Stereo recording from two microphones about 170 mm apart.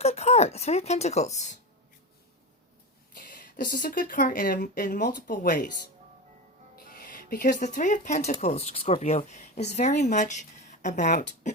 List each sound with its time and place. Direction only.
0.0 s a woman's voice: 40° left (ahead or behind)
3.2 s speech: 55° left (ahead or behind)
6.7 s speech: 55° left (ahead or behind)